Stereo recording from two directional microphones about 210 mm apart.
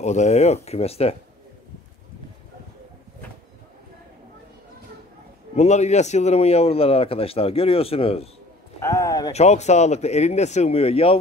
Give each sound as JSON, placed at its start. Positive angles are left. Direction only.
{"t": 0.0, "sound": "a man's voice", "side_deg": 35}
{"t": 5.6, "sound": "a man's voice", "side_deg": 35}
{"t": 8.8, "sound": "speech", "side_deg": 15}
{"t": 9.3, "sound": "speech", "side_deg": 30}